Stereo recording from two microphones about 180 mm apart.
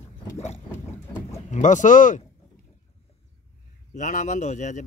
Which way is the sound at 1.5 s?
45° left (ahead or behind).